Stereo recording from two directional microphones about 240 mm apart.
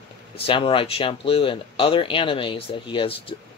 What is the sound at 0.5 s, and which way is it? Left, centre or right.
Speech, left.